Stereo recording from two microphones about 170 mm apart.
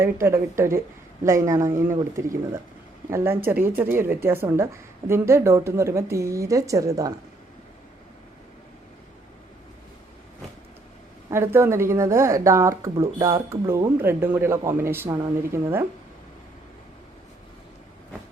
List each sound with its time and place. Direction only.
0.0 s speech: 15° right (ahead or behind)
11.3 s speech: 15° right (ahead or behind)